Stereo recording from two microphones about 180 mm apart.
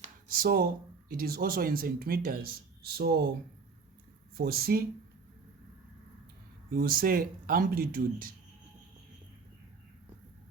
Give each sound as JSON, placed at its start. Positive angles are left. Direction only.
{"t": 0.3, "sound": "speech", "side_deg": -55}
{"t": 4.4, "sound": "speech", "side_deg": -60}
{"t": 6.7, "sound": "speech", "side_deg": -55}